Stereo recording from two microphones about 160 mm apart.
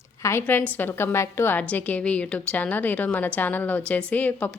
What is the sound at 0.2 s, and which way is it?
A woman's voice, 15° left (ahead or behind).